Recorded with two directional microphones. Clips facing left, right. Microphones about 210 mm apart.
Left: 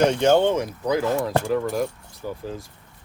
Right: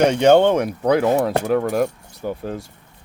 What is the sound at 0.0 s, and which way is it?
Speech, 70° right (ahead or behind).